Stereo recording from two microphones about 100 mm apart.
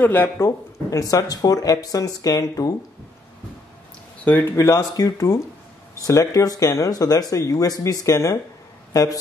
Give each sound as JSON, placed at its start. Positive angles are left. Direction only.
{"t": 0.0, "sound": "speech", "side_deg": 15}
{"t": 0.4, "sound": "speech", "side_deg": 35}
{"t": 4.2, "sound": "speech", "side_deg": 15}
{"t": 4.6, "sound": "speech", "side_deg": 30}